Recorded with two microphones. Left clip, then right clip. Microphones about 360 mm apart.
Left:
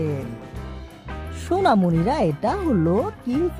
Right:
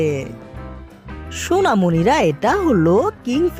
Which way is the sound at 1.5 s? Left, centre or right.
Centre.